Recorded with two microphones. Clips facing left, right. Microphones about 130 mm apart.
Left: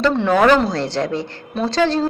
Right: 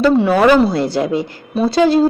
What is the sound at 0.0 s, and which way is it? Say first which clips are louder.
A woman's voice: right 3 dB; 5° right (ahead or behind).